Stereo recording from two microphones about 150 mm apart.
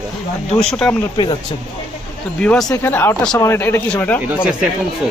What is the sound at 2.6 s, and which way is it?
Speech, 20° left (ahead or behind).